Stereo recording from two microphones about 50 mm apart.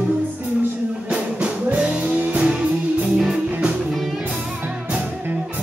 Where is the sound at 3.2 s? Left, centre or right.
Centre.